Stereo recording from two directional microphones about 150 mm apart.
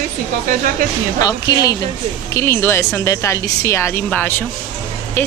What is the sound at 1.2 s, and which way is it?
Speech, 25° left (ahead or behind).